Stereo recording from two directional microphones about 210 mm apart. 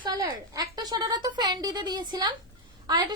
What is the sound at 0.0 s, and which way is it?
A woman's voice, 20° right (ahead or behind).